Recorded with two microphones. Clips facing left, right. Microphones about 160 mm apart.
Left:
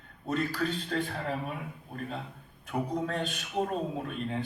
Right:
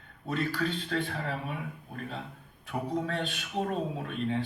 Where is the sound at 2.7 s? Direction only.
40° left (ahead or behind).